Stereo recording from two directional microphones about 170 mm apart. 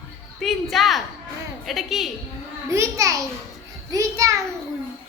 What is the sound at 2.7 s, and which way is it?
A child's voice, 20° right (ahead or behind).